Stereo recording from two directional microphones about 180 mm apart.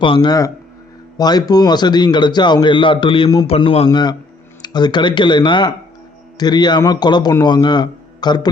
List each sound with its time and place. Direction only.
0.0 s a man's voice: 25° left (ahead or behind)
3.8 s a man's voice: 25° left (ahead or behind)